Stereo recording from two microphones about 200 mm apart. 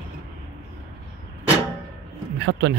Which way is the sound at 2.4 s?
65° right (ahead or behind).